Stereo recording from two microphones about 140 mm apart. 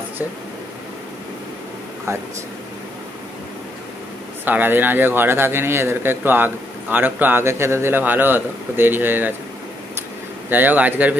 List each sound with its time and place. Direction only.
2.1 s speech: 20° right (ahead or behind)
4.5 s a man's voice: 15° right (ahead or behind)
10.5 s a man's voice: 10° right (ahead or behind)